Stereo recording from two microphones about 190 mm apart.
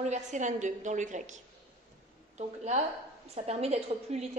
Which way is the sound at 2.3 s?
35° right (ahead or behind).